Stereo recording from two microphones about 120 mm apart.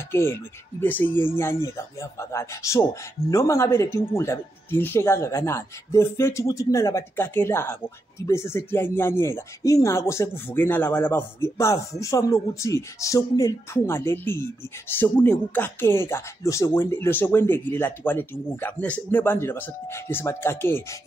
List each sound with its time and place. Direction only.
0.1 s speech: 20° left (ahead or behind)